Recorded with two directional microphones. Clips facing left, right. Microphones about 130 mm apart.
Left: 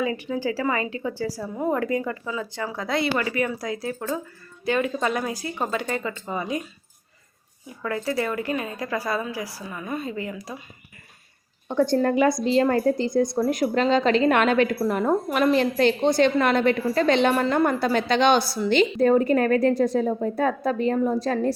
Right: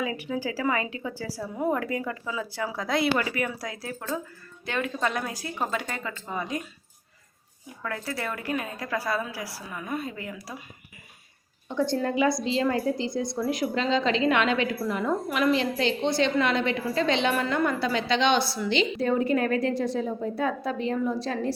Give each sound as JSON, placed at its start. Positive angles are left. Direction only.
{"t": 0.0, "sound": "a woman's voice", "side_deg": -5}
{"t": 7.8, "sound": "a woman's voice", "side_deg": 5}
{"t": 11.7, "sound": "a woman's voice", "side_deg": 55}
{"t": 17.7, "sound": "a woman's voice", "side_deg": 50}